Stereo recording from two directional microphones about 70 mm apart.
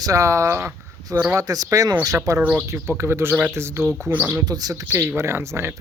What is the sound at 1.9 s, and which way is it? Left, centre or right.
Speech, right.